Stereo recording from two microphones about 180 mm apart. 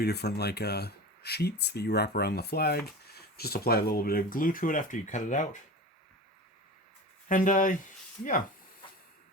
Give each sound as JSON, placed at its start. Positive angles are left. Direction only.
{"t": 0.0, "sound": "speech", "side_deg": 65}
{"t": 7.3, "sound": "speech", "side_deg": 45}